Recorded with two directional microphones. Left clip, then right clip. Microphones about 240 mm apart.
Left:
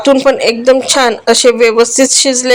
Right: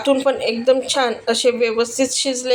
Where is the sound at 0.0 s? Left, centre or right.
Left.